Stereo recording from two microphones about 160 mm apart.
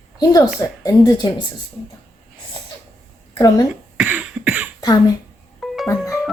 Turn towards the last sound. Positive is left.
turn(degrees=20)  # may be behind; listen again after turning